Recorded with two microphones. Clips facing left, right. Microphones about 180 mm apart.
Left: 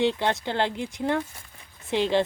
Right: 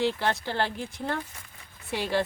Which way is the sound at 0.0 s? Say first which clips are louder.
Left 3 dB; 20° left (ahead or behind).